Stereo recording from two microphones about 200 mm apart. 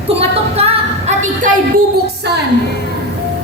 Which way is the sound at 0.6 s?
30° right (ahead or behind).